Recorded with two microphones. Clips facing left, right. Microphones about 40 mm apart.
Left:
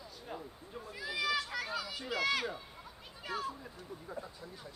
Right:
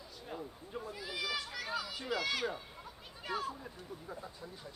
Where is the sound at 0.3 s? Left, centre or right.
Centre.